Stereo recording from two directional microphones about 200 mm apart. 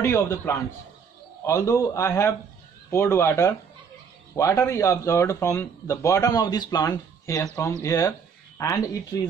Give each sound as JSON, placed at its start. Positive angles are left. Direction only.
{"t": 0.0, "sound": "speech", "side_deg": 15}